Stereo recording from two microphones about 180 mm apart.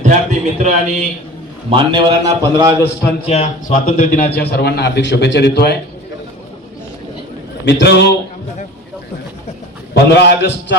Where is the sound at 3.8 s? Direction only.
50° left (ahead or behind); by 5.7 s 65° left (ahead or behind).